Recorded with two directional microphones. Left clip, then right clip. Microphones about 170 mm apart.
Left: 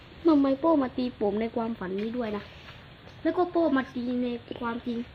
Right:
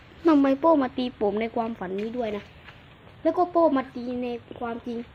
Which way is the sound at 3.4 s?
10° right (ahead or behind).